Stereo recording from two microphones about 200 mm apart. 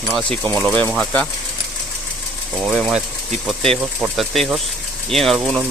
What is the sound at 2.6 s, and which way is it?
Speech, 5° right (ahead or behind).